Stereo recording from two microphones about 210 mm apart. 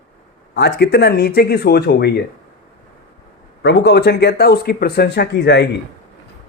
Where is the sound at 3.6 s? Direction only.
55° left (ahead or behind).